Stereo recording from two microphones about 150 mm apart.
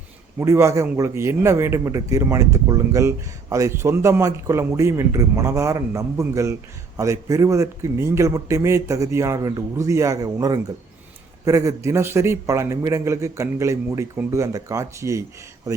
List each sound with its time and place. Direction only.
0.3 s a man's voice: 20° right (ahead or behind)